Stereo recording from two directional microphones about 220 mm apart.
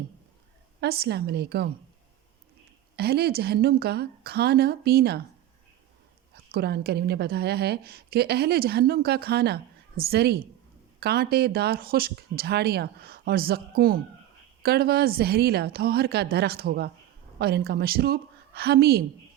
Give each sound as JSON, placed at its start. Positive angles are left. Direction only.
{"t": 0.8, "sound": "a woman's voice", "side_deg": -45}
{"t": 2.9, "sound": "a woman's voice", "side_deg": -45}
{"t": 6.3, "sound": "a woman's voice", "side_deg": -45}